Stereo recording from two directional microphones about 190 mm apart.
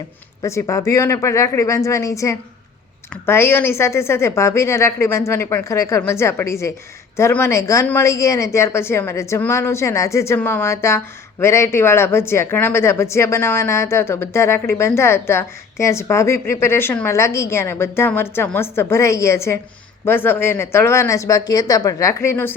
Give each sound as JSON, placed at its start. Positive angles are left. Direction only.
{"t": 0.4, "sound": "a woman's voice", "side_deg": 15}